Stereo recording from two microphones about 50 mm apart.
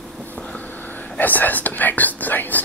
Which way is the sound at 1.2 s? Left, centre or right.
Left.